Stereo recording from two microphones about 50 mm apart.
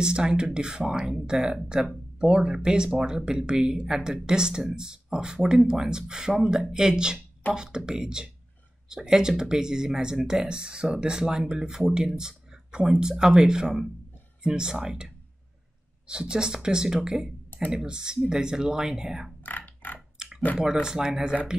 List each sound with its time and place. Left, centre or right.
0.0 s speech: centre
16.1 s speech: centre
19.4 s music: left
20.2 s typing: centre
20.8 s speech: centre